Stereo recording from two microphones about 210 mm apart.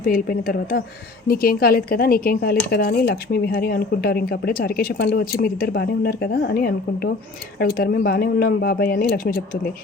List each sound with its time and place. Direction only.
0.0 s a woman's voice: 40° left (ahead or behind)